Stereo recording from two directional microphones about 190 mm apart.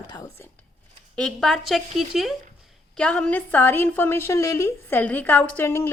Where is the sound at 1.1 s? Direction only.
5° left (ahead or behind).